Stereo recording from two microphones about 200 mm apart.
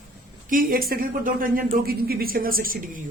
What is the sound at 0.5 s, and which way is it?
A woman's voice, 45° right (ahead or behind).